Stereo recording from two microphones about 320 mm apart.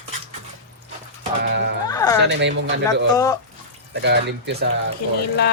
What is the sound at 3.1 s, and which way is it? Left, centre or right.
Speech, centre.